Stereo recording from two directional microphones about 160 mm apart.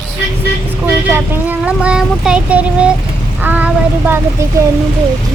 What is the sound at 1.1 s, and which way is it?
Speech, 10° right (ahead or behind).